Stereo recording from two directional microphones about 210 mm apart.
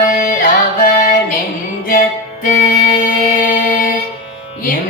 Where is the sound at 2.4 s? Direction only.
40° left (ahead or behind).